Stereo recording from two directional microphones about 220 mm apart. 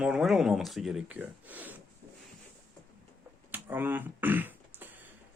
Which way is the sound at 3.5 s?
10° right (ahead or behind).